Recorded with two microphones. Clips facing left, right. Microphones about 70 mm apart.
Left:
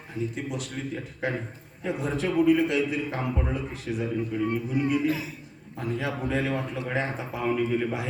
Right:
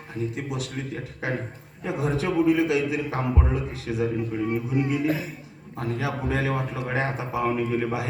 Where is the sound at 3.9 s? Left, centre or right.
Right.